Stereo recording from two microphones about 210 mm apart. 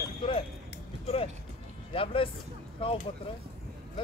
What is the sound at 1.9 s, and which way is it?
Speech, 25° left (ahead or behind).